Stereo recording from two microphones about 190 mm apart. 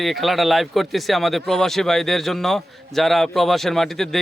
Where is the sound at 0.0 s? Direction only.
Centre (ahead or behind).